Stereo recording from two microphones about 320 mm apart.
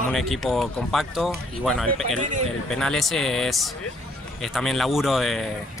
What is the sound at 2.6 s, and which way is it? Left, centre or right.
Speech, centre.